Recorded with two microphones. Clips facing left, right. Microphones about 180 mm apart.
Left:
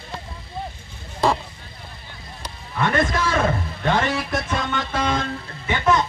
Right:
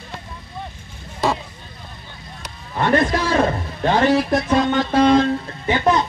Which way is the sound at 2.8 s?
35° right (ahead or behind).